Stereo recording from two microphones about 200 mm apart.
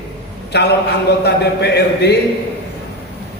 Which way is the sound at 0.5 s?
55° left (ahead or behind).